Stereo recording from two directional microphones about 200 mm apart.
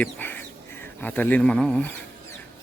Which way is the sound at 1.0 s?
10° left (ahead or behind).